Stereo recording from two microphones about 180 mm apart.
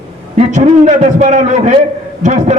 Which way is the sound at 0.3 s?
40° right (ahead or behind).